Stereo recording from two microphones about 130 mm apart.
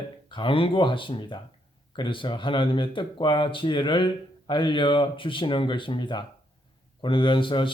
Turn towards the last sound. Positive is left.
turn(degrees=40)  # may be behind; listen again after turning